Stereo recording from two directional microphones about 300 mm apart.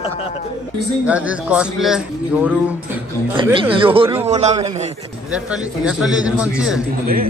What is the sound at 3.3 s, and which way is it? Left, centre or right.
A man's voice, centre.